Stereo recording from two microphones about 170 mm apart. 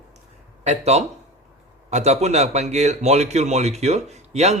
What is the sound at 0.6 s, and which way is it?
A man's voice, 40° right (ahead or behind).